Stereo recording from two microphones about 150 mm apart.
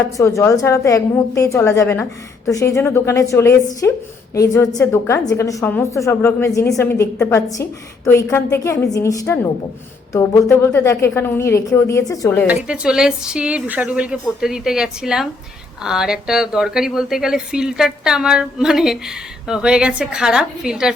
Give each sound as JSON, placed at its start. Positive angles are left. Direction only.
{"t": 0.0, "sound": "a woman's voice", "side_deg": 20}
{"t": 12.5, "sound": "speech", "side_deg": -5}